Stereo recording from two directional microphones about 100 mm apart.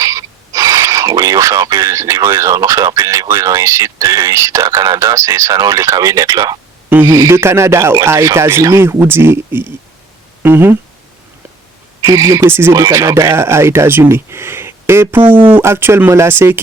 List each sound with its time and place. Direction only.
0.0 s speech: 35° right (ahead or behind)
12.0 s speech: 30° right (ahead or behind)